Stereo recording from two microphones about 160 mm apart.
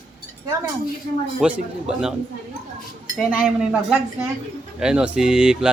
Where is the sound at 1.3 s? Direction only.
5° right (ahead or behind).